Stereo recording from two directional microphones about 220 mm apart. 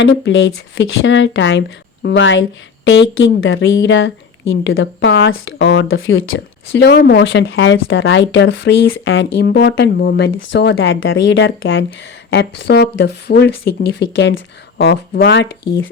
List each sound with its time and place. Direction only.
0.0 s speech: 55° left (ahead or behind)